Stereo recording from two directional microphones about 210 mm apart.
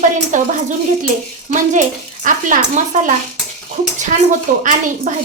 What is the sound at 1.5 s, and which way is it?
Speech, 35° right (ahead or behind).